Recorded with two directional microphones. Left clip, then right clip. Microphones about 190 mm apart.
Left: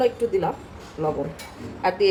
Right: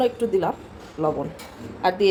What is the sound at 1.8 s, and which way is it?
Speech, 15° right (ahead or behind).